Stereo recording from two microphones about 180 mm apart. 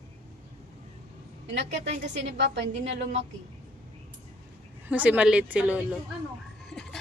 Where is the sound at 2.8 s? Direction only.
35° right (ahead or behind).